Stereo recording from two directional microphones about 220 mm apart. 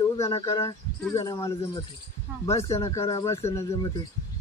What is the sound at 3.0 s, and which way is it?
Speech, 25° left (ahead or behind).